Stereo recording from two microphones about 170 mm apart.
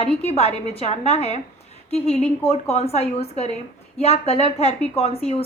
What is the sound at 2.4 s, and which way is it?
A woman's voice, 35° left (ahead or behind).